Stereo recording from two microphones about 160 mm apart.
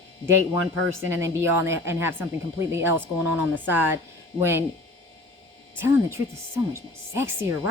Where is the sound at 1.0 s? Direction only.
15° right (ahead or behind).